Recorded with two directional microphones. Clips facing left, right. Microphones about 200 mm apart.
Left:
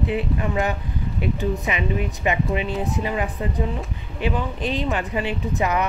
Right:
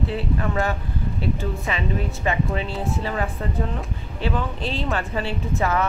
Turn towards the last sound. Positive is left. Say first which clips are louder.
# even
turn(degrees=15)  # may be behind; listen again after turning